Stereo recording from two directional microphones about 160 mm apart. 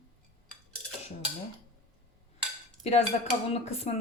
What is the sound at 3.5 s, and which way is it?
Speech, 40° left (ahead or behind).